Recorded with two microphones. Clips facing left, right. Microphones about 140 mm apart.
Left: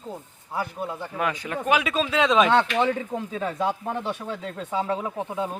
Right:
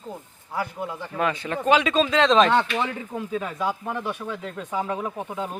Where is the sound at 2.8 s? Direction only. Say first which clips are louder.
Left 4 dB; 25° left (ahead or behind).